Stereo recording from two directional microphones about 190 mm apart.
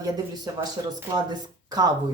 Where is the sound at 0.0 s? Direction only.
20° right (ahead or behind).